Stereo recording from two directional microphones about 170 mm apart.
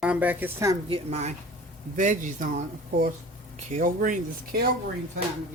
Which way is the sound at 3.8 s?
55° right (ahead or behind).